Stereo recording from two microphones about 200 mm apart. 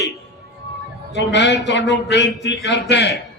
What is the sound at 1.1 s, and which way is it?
A man's voice, 60° left (ahead or behind).